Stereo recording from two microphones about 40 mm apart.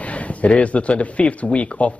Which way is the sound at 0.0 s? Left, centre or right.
Left.